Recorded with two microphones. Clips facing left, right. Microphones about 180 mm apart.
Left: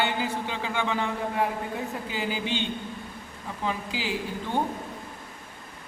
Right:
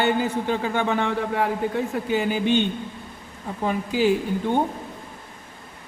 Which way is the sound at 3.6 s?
50° right (ahead or behind).